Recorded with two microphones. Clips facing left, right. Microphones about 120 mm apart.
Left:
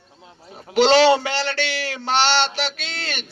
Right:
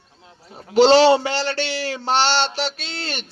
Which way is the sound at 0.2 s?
20° left (ahead or behind).